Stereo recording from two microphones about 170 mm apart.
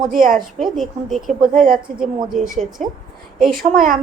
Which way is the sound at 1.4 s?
55° right (ahead or behind).